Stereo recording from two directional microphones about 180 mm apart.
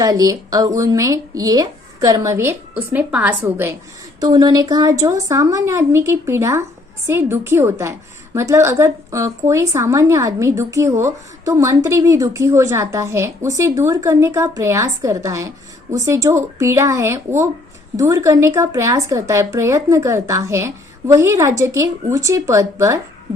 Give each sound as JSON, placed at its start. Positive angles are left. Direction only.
{"t": 0.0, "sound": "a woman's voice", "side_deg": -20}
{"t": 4.2, "sound": "a woman's voice", "side_deg": -20}